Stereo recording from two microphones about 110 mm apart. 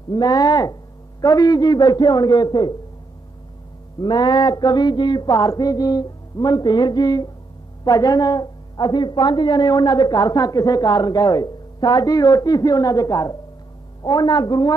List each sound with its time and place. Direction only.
0.1 s a woman's voice: 35° left (ahead or behind)
4.0 s a woman's voice: 40° left (ahead or behind)